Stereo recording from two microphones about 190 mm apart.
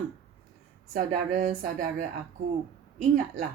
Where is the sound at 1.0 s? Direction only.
40° right (ahead or behind).